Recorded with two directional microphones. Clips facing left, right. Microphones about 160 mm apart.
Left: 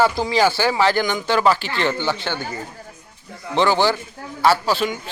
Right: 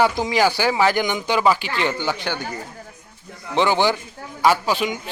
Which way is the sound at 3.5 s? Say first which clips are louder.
Left 1 dB; 15° right (ahead or behind).